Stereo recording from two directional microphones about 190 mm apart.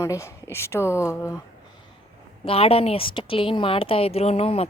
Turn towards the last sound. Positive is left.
turn(degrees=30)  # may be behind; listen again after turning